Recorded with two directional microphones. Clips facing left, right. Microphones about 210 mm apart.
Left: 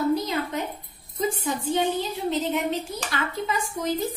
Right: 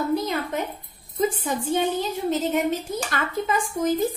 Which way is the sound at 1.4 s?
50° right (ahead or behind).